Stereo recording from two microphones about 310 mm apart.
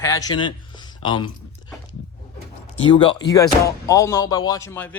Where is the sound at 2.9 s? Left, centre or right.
Centre.